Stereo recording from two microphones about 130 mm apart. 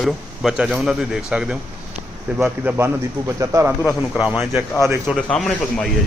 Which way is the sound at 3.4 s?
20° right (ahead or behind).